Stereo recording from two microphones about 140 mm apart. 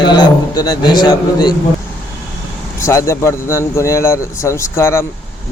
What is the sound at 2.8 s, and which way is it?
Speech, 20° left (ahead or behind).